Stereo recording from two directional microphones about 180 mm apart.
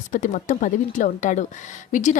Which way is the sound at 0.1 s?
50° left (ahead or behind).